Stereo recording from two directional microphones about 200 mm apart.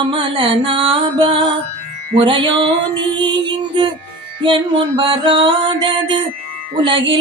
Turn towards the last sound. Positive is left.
turn(degrees=-25)  # may be behind; listen again after turning